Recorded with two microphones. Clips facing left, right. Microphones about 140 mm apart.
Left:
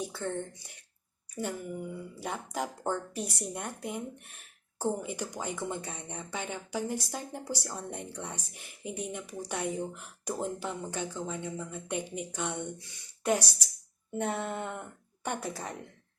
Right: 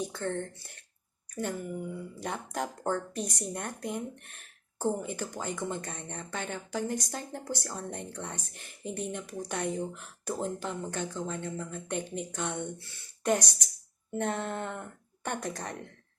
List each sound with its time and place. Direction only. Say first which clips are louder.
0.0 s speech: right 1 dB; 10° left (ahead or behind)
2.2 s speech: even; 5° left (ahead or behind)